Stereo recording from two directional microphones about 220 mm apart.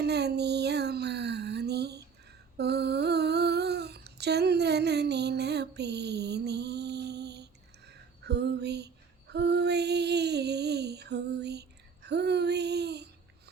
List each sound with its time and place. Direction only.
0.0 s music: 50° right (ahead or behind)
2.6 s humming: 50° right (ahead or behind)
8.2 s lullaby: 50° right (ahead or behind)
9.3 s female singing: 50° right (ahead or behind)
12.0 s a sound: 50° right (ahead or behind)